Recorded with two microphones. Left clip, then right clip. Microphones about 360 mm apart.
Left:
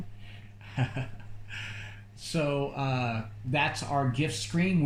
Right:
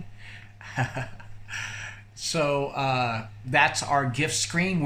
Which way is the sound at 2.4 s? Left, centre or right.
Right.